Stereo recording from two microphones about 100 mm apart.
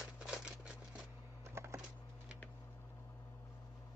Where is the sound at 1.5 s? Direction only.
25° right (ahead or behind).